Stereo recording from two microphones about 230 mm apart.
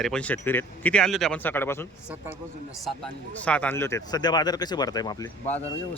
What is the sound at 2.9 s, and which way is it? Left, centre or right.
Speech, centre.